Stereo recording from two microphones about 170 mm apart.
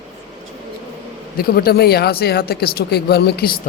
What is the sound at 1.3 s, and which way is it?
Speech, 60° left (ahead or behind).